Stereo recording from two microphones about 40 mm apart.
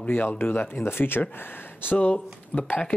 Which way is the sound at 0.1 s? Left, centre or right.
Left.